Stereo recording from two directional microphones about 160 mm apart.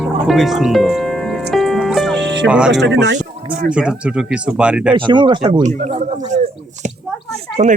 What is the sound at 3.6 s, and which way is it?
Speech, 5° right (ahead or behind).